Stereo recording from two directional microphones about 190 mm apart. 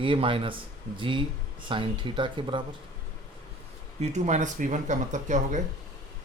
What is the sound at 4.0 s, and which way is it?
Speech, 35° right (ahead or behind).